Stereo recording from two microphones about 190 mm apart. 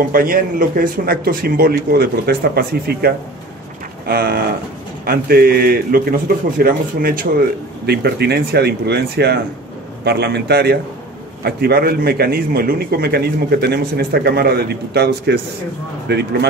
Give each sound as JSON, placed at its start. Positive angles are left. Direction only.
{"t": 0.1, "sound": "a man's voice", "side_deg": -50}